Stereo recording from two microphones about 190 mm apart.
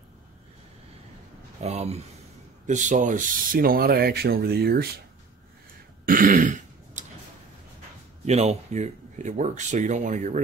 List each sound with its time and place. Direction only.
1.6 s speech: 35° right (ahead or behind); by 5.0 s 55° right (ahead or behind)
6.0 s throat clearing: 45° right (ahead or behind)
8.3 s speech: 35° right (ahead or behind)